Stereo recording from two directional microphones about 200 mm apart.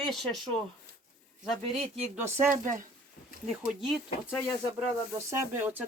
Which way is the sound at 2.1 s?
5° right (ahead or behind).